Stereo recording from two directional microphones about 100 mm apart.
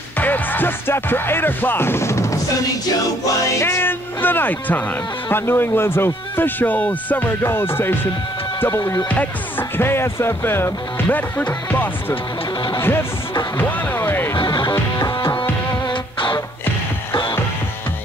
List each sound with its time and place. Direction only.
0.2 s music: 20° left (ahead or behind)
3.6 s speech: 20° left (ahead or behind)
9.1 s speech: 20° left (ahead or behind)
12.8 s music: 25° left (ahead or behind)
14.3 s music: 50° left (ahead or behind)